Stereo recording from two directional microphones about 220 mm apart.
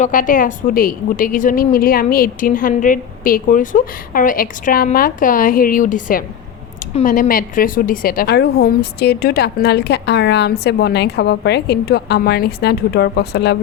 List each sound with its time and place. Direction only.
0.0 s a woman's voice: 40° left (ahead or behind)